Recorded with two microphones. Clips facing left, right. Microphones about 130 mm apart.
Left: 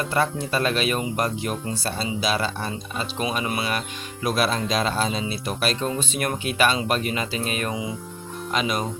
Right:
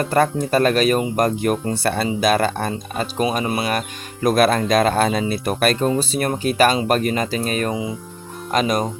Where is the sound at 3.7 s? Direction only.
45° right (ahead or behind).